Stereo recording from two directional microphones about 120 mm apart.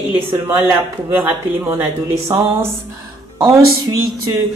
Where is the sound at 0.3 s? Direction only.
15° right (ahead or behind).